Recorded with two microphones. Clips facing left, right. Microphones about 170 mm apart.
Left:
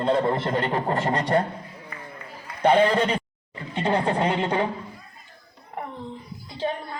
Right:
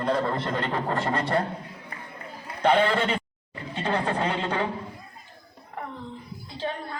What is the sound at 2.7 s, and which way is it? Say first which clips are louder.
Speech: left 3 dB; 40° left (ahead or behind).